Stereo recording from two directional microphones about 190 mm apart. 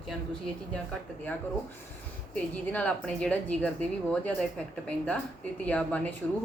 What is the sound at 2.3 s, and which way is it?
A woman's voice, 5° left (ahead or behind).